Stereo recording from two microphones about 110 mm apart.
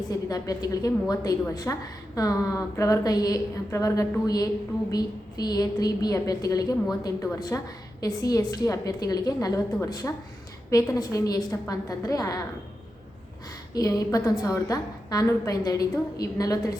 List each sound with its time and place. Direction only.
0.1 s a woman's voice: 35° left (ahead or behind)
13.7 s a woman's voice: 35° left (ahead or behind)